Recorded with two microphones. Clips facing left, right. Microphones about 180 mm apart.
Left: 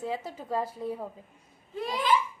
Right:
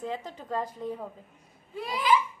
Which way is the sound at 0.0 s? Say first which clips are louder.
Left 1 dB; 5° left (ahead or behind).